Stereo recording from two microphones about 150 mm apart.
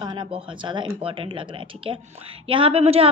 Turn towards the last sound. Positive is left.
turn(degrees=-40)  # may be behind; listen again after turning